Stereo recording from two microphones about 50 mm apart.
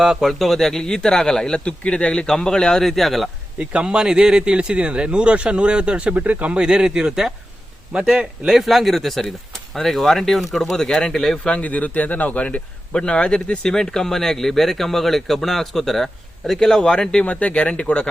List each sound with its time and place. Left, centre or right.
0.0 s a man's voice: centre
3.6 s speech: right
3.8 s a man's voice: centre
11.5 s a man's voice: left